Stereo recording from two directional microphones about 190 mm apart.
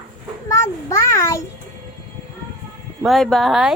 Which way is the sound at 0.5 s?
15° left (ahead or behind).